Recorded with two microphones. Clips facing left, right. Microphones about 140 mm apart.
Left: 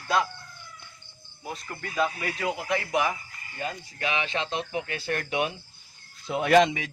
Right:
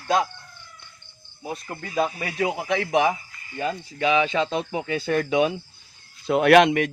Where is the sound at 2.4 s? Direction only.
90° right.